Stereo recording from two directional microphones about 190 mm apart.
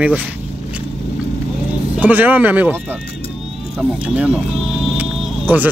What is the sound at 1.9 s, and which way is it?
Speech, 10° right (ahead or behind).